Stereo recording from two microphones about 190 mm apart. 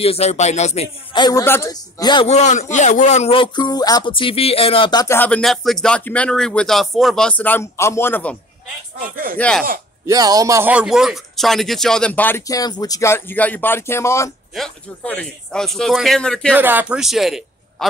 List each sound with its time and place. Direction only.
0.0 s speech: 35° left (ahead or behind)
1.1 s a man's voice: 20° left (ahead or behind)
2.2 s speech: 35° left (ahead or behind)
5.0 s speech: 10° left (ahead or behind)
9.0 s speech: 45° right (ahead or behind)
9.4 s speech: 5° left (ahead or behind)
10.0 s speech: 20° right (ahead or behind); by 14.3 s 15° left (ahead or behind)
14.5 s speech: 5° left (ahead or behind)
16.5 s a man's voice: 10° right (ahead or behind)